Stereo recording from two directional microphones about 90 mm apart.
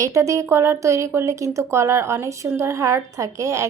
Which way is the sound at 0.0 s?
35° right (ahead or behind).